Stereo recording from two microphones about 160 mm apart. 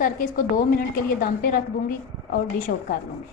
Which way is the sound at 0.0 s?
60° left (ahead or behind).